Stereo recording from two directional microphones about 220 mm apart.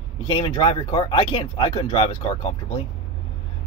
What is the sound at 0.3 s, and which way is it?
Speech, 25° left (ahead or behind).